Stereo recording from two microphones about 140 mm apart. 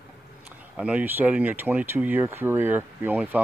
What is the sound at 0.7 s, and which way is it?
Speech, 10° right (ahead or behind).